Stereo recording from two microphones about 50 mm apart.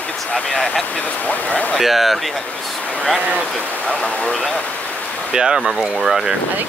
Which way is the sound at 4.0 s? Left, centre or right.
Centre.